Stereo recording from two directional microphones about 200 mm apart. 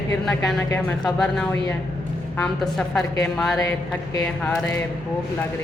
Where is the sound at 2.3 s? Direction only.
5° left (ahead or behind).